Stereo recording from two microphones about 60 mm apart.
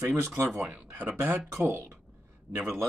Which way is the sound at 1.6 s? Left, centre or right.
Right.